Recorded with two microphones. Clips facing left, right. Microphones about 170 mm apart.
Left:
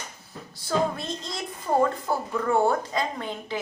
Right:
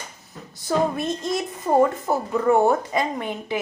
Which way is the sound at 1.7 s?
35° right (ahead or behind).